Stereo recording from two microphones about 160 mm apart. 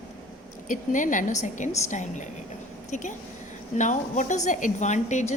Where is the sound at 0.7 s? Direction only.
55° left (ahead or behind).